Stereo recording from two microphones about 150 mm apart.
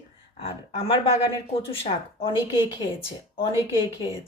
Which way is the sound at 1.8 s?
35° left (ahead or behind).